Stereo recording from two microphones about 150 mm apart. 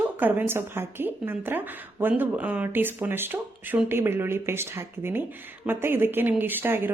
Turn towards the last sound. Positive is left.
turn(degrees=-15)  # may be behind; listen again after turning